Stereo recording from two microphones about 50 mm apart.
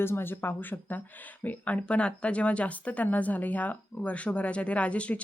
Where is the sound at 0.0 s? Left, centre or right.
Left.